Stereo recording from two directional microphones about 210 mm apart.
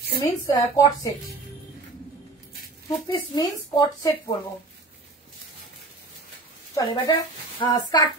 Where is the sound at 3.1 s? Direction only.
20° left (ahead or behind).